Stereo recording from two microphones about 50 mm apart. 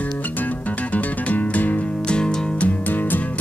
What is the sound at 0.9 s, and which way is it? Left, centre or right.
Music, left.